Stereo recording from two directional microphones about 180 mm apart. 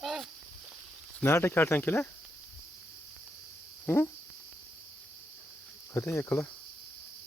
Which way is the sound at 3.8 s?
10° left (ahead or behind).